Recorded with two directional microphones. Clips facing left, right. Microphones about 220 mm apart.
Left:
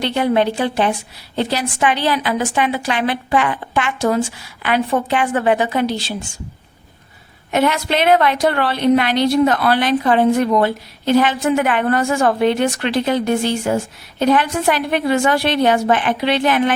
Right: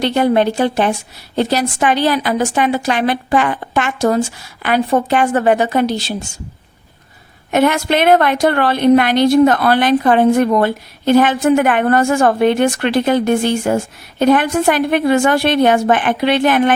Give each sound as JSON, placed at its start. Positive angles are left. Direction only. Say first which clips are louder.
{"t": 0.0, "sound": "a woman's voice", "louder": "right 3 dB", "side_deg": -45}
{"t": 7.5, "sound": "a woman's voice", "louder": "right 3 dB", "side_deg": -50}